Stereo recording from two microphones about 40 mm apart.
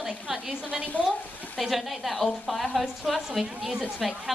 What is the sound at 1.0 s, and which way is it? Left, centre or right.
Speech, left.